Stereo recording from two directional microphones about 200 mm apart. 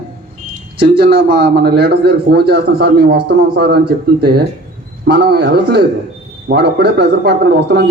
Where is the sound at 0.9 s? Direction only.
50° right (ahead or behind).